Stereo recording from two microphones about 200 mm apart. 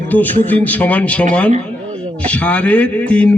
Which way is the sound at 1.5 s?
30° right (ahead or behind).